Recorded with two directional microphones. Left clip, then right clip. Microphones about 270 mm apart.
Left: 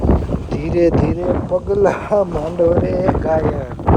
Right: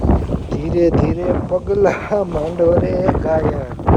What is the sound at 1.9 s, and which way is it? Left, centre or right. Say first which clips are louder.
Speech: left 2 dB; right.